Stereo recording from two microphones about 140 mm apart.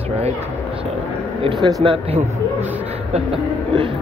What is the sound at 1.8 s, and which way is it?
Speech, 40° right (ahead or behind).